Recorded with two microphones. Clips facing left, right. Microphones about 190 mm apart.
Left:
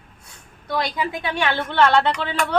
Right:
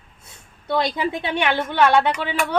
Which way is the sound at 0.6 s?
25° right (ahead or behind).